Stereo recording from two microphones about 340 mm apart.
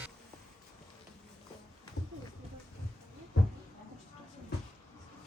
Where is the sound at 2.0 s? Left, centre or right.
Left.